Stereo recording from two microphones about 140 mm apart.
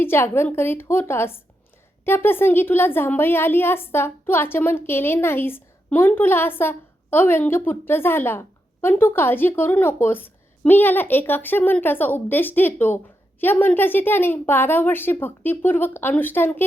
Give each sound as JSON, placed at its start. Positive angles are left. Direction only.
{"t": 0.0, "sound": "a woman's voice", "side_deg": 15}